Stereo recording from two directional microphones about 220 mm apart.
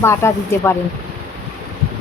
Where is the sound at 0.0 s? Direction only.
10° left (ahead or behind).